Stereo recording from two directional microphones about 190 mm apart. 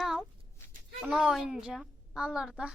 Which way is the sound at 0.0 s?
Centre (ahead or behind).